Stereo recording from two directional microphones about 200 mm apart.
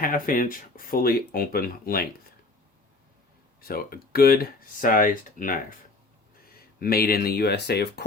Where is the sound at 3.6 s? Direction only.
50° left (ahead or behind).